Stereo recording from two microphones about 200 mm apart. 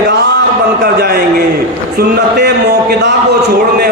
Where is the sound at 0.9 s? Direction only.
50° right (ahead or behind).